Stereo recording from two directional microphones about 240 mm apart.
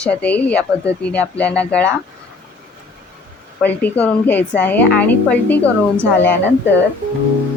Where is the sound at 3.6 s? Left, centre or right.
Centre.